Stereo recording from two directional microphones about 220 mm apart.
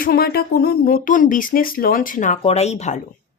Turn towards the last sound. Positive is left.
turn(degrees=30)  # may be behind; listen again after turning